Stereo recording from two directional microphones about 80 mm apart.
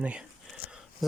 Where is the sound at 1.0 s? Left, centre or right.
Centre.